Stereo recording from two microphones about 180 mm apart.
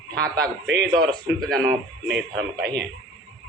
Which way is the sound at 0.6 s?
75° right (ahead or behind).